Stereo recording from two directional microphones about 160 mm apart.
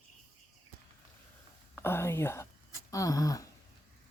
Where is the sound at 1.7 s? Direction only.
15° left (ahead or behind).